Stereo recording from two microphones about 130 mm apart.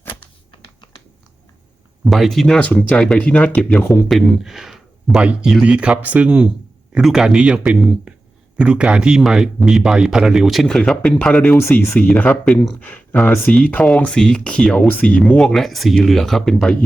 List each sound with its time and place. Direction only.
0.2 s computer keyboard: 40° left (ahead or behind)
2.0 s speech: centre (ahead or behind)
11.5 s speech: 20° left (ahead or behind); by 16.7 s 5° left (ahead or behind)